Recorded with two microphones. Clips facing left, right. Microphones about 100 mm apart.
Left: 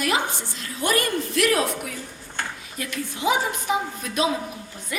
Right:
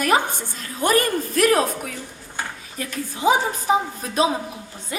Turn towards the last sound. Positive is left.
turn(degrees=-35)  # may be behind; listen again after turning